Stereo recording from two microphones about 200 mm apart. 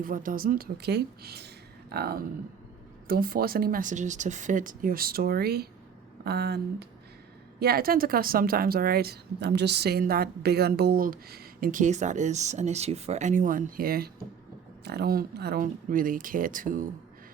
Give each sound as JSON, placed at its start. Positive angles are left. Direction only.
{"t": 0.0, "sound": "a woman's voice", "side_deg": -45}